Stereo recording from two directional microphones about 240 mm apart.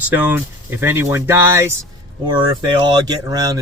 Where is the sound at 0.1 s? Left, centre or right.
Centre.